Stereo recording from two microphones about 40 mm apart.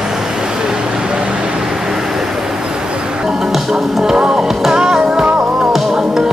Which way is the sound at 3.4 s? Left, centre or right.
Centre.